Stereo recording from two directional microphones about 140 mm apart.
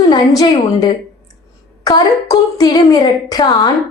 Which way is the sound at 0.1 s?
25° left (ahead or behind).